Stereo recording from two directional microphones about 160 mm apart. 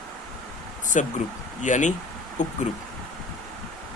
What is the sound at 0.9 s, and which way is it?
Speech, 50° left (ahead or behind).